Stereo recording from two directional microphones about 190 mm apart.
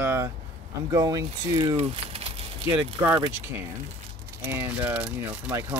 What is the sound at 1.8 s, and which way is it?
Speech, 30° right (ahead or behind).